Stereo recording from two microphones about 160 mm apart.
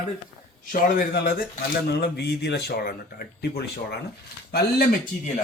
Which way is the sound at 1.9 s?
90° left.